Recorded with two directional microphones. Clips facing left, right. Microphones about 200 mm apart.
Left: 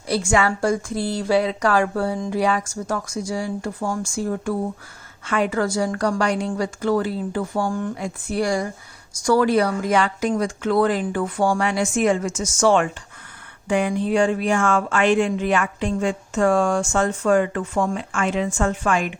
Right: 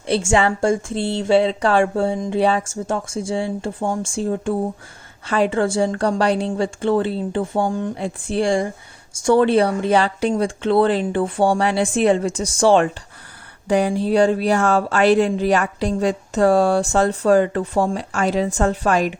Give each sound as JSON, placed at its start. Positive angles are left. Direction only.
{"t": 0.1, "sound": "speech", "side_deg": -30}